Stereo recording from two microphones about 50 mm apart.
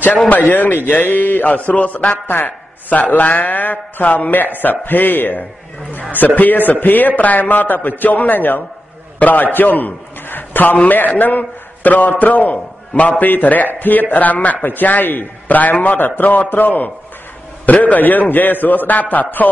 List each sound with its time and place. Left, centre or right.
0.3 s a man's voice: left